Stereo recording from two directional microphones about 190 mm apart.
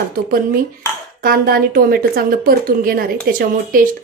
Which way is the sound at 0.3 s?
50° right (ahead or behind).